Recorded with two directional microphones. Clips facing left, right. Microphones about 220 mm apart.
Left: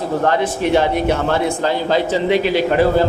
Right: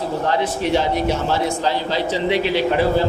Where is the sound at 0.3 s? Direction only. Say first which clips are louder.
Left 2 dB; 55° left (ahead or behind).